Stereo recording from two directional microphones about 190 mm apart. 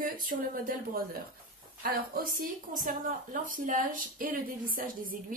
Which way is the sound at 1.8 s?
50° right (ahead or behind).